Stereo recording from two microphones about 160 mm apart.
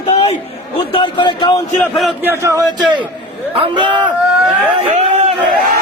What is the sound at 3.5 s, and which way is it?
Speech, 30° right (ahead or behind).